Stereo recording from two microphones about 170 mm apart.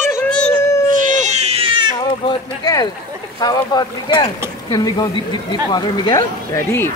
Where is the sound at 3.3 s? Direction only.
25° left (ahead or behind).